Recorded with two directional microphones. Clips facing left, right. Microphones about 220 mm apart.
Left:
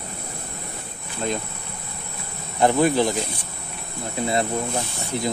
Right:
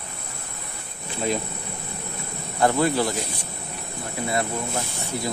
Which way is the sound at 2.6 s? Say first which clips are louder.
Left 3 dB; 20° left (ahead or behind).